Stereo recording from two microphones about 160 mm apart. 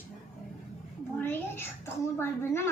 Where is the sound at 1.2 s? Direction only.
15° left (ahead or behind).